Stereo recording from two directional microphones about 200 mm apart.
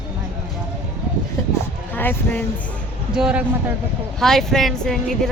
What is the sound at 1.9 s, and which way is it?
Speech, 10° left (ahead or behind).